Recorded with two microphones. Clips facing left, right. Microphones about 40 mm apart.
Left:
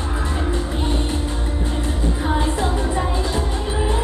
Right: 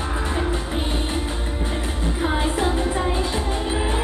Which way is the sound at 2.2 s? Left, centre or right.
Centre.